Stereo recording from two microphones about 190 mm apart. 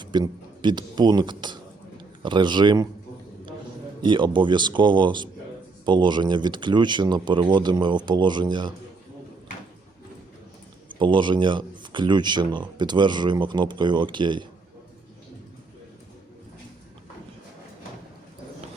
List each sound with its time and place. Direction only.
0.0 s speech: 25° right (ahead or behind)
4.0 s speech: 25° right (ahead or behind)
10.8 s speech: 25° right (ahead or behind)